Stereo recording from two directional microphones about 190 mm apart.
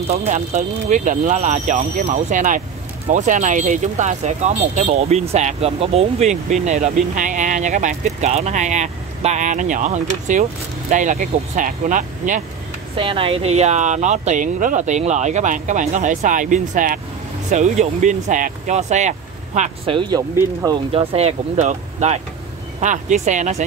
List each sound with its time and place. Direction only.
0.1 s speech: 35° right (ahead or behind)
12.9 s speech: 30° right (ahead or behind)
20.0 s speech: 20° right (ahead or behind)
20.9 s speech: 30° right (ahead or behind)